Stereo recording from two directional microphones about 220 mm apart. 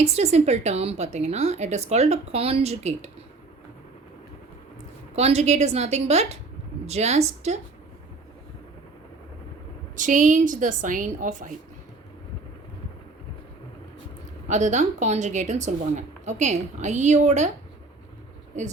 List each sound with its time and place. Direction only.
0.0 s a woman's voice: 30° right (ahead or behind)
5.1 s a woman's voice: 30° right (ahead or behind)
9.9 s a woman's voice: 35° right (ahead or behind)
14.4 s a woman's voice: 35° right (ahead or behind)
18.5 s a woman's voice: 35° right (ahead or behind)